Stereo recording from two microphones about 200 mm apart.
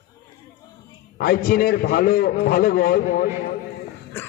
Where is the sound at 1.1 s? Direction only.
50° left (ahead or behind).